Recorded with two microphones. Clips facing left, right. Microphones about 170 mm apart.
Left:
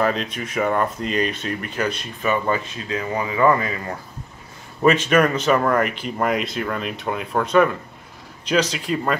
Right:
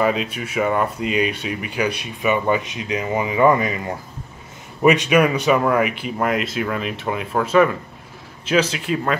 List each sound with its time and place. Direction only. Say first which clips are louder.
0.0 s speech: right 2 dB; 5° right (ahead or behind)